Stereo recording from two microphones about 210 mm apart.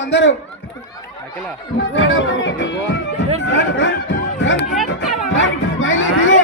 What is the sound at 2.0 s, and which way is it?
Speech, 65° left (ahead or behind).